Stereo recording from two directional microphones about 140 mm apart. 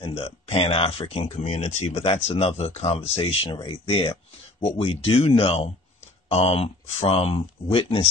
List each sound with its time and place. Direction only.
0.0 s speech: 40° left (ahead or behind)